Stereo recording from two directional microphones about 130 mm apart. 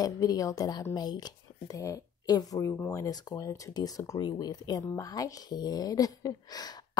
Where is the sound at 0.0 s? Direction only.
30° left (ahead or behind).